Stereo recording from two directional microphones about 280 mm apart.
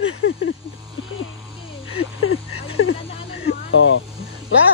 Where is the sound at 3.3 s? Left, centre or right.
Left.